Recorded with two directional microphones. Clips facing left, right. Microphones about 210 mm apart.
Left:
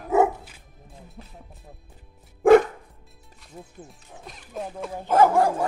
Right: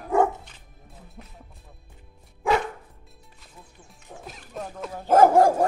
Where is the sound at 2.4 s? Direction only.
50° left (ahead or behind).